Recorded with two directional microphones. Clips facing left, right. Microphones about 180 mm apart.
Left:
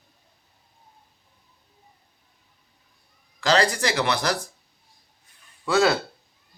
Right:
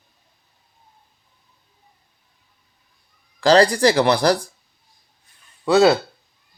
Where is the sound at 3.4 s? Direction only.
35° right (ahead or behind).